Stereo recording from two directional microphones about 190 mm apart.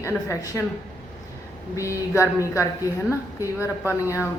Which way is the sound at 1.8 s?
15° left (ahead or behind).